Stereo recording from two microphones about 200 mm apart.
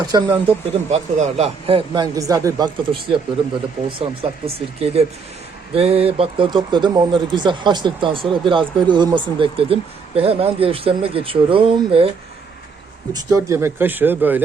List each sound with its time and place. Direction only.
0.0 s speech: 20° right (ahead or behind)
0.9 s speech: 35° right (ahead or behind)
13.1 s speech: 15° right (ahead or behind)